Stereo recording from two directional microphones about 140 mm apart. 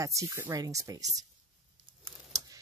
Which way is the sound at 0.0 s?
25° right (ahead or behind).